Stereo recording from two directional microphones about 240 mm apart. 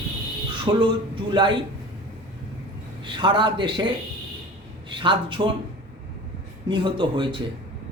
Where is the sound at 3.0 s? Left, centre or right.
Centre.